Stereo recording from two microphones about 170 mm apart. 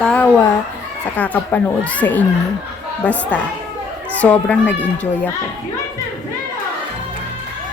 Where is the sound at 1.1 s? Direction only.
10° left (ahead or behind).